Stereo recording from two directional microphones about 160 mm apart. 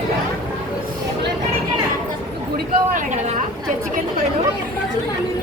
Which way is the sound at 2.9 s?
50° right (ahead or behind).